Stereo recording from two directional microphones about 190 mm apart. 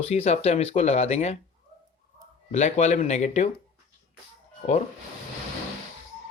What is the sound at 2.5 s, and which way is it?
Speech, 35° left (ahead or behind).